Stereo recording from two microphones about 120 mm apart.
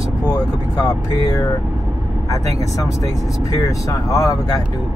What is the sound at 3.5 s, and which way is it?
Speech, 25° left (ahead or behind).